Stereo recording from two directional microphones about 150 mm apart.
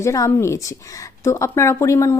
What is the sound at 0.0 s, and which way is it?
Speech, 20° left (ahead or behind).